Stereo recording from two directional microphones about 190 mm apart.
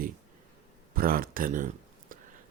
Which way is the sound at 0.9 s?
50° right (ahead or behind).